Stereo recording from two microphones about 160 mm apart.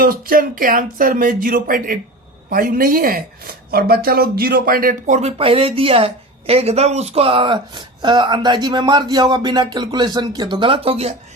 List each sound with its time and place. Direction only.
0.0 s speech: 65° right (ahead or behind)
5.4 s a woman's voice: 35° right (ahead or behind)